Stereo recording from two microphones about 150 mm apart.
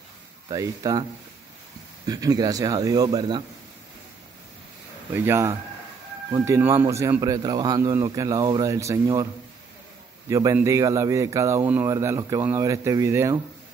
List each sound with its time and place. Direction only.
0.5 s speech: 25° right (ahead or behind)
2.0 s speech: 25° right (ahead or behind)
5.1 s speech: 15° right (ahead or behind)
10.3 s speech: 20° right (ahead or behind)